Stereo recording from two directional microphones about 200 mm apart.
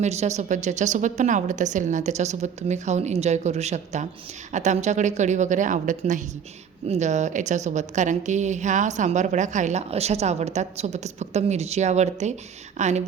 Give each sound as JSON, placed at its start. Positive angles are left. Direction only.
{"t": 0.0, "sound": "a woman's voice", "side_deg": -35}